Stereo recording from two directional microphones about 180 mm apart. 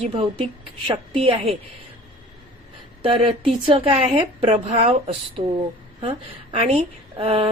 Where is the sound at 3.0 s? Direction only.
30° right (ahead or behind).